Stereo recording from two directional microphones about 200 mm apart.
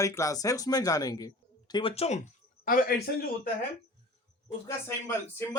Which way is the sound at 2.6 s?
45° left (ahead or behind).